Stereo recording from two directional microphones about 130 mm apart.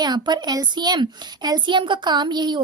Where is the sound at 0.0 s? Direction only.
35° right (ahead or behind).